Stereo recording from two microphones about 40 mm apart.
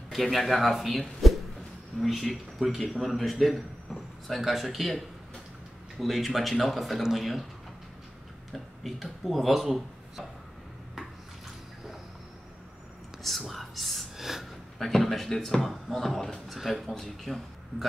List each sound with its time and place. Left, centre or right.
0.1 s a man's voice: centre
8.8 s a man's voice: centre
13.5 s speech: centre
14.1 s gasp: centre
14.8 s a man's voice: centre